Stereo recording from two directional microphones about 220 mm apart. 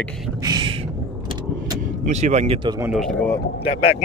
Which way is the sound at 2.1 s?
30° right (ahead or behind).